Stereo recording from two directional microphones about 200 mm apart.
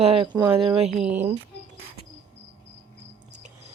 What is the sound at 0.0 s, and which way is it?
Speech, 25° right (ahead or behind).